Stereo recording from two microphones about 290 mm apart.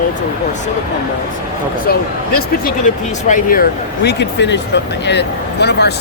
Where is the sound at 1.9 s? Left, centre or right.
Left.